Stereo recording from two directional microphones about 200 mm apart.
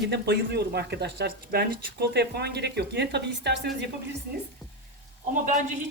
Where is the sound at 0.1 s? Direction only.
55° right (ahead or behind).